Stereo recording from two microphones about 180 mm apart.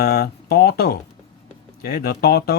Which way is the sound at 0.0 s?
60° left (ahead or behind).